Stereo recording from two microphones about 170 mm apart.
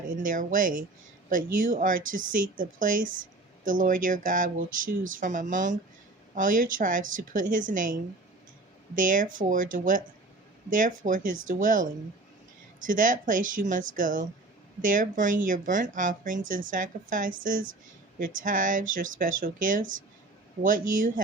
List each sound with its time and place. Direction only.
0.2 s speech: 50° right (ahead or behind)
9.0 s speech: 50° right (ahead or behind)